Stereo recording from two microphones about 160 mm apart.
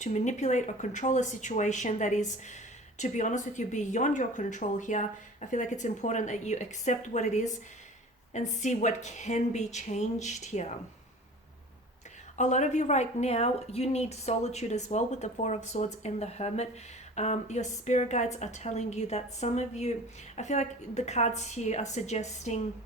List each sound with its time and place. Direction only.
0.0 s a woman's voice: 45° left (ahead or behind)
12.4 s a woman's voice: 50° left (ahead or behind)